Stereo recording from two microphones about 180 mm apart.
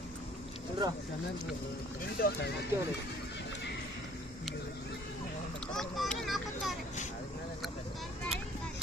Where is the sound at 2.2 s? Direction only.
60° left (ahead or behind).